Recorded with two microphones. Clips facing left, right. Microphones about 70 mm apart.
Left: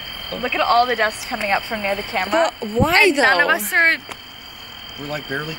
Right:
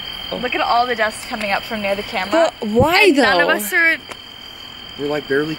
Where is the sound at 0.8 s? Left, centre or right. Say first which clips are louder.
Right 1 dB; centre.